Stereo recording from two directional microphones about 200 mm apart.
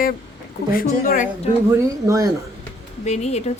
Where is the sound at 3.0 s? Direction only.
35° left (ahead or behind).